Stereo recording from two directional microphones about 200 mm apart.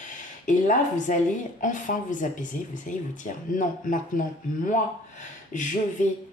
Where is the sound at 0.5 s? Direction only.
40° left (ahead or behind).